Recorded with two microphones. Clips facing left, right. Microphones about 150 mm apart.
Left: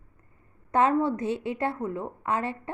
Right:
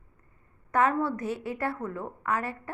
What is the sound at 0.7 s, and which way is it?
A woman's voice, 20° left (ahead or behind).